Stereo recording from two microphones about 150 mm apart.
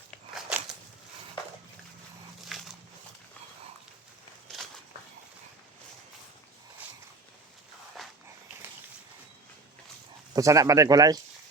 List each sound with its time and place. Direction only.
8.0 s walk: centre (ahead or behind)
10.3 s speech: 20° right (ahead or behind)